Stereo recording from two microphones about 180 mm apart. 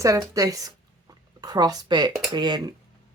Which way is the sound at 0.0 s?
20° right (ahead or behind).